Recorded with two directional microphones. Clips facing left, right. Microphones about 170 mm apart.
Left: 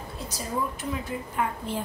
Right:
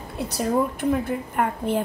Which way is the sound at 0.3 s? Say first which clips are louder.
Right 8 dB; 60° right (ahead or behind).